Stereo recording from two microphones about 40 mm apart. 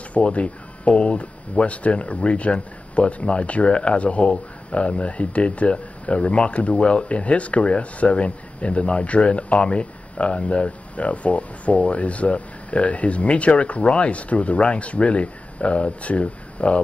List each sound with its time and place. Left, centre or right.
0.1 s speech: left